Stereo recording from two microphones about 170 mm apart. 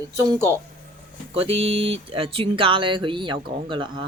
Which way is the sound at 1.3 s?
35° right (ahead or behind).